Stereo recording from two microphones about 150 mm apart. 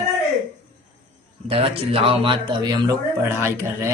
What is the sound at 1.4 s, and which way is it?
Speech, 40° right (ahead or behind).